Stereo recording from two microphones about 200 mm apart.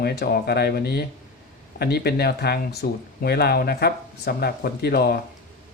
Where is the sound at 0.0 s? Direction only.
50° left (ahead or behind).